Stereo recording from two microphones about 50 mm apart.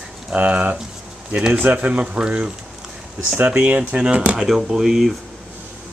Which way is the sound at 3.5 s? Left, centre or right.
Right.